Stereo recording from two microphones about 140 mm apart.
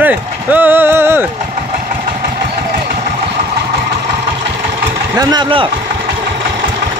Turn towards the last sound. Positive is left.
turn(degrees=-35)  # may be behind; listen again after turning